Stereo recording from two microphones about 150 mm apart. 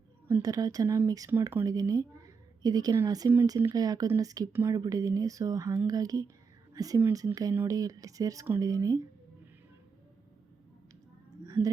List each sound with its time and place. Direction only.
0.3 s speech: 20° right (ahead or behind)
11.4 s music: 20° right (ahead or behind)